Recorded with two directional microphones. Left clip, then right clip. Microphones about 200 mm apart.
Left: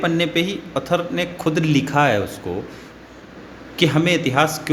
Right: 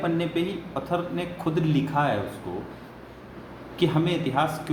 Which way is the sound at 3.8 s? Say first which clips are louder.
Left 7 dB; 50° left (ahead or behind).